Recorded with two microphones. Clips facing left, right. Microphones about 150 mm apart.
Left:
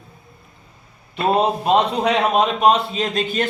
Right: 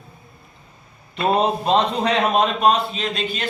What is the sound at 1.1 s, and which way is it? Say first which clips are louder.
A man's voice: left 1 dB; 10° left (ahead or behind).